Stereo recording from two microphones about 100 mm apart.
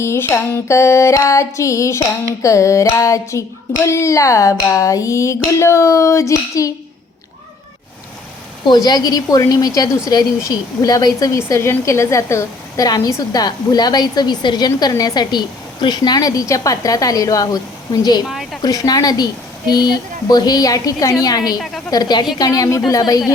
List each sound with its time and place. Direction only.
0.0 s music: 25° left (ahead or behind)
2.4 s a woman's voice: 30° left (ahead or behind)
8.6 s a woman's voice: 45° left (ahead or behind)
18.3 s a woman's voice: centre (ahead or behind)
18.6 s a woman's voice: 35° left (ahead or behind)